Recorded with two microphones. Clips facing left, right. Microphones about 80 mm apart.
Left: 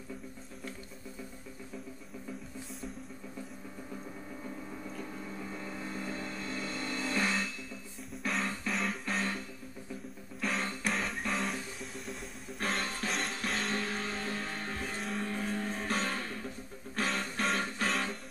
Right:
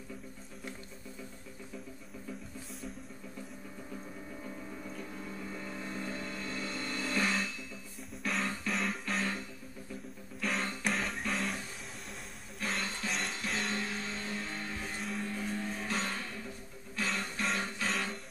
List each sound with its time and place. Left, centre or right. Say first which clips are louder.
5.5 s a sound: left 1 dB; centre
6.1 s vehicle: left 1 dB; centre
6.7 s vehicle: left 1 dB; centre
8.1 s music: left 1 dB; centre
10.4 s music: even; centre
12.5 s music: left 2 dB; left
13.1 s music: left 1 dB; centre
13.4 s music: left 2 dB; left